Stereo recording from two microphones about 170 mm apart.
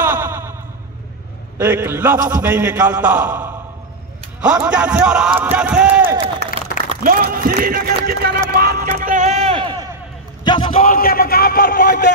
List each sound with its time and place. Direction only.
0.0 s a sound: 15° right (ahead or behind)
1.6 s a man's voice: 15° right (ahead or behind)
7.0 s music: 55° right (ahead or behind); by 9.8 s 30° right (ahead or behind)
10.4 s a man's voice: 30° left (ahead or behind)
10.8 s a man's voice: 55° left (ahead or behind)